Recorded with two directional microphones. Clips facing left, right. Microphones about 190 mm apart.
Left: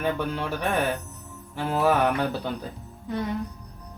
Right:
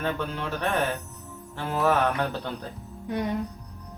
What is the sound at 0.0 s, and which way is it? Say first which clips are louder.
Speech: left 3 dB; 10° left (ahead or behind).